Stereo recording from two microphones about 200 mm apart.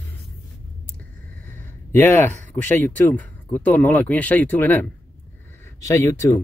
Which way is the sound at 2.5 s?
10° left (ahead or behind).